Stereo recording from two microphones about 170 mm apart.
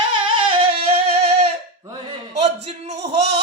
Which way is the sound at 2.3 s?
40° right (ahead or behind).